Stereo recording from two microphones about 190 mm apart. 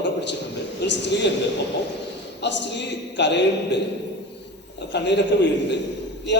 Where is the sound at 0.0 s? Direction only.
65° left (ahead or behind).